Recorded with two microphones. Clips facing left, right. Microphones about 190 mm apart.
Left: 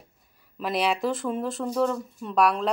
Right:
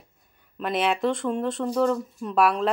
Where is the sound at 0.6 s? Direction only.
Centre (ahead or behind).